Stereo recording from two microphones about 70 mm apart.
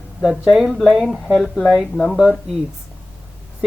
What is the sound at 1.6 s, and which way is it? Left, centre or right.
Speech, centre.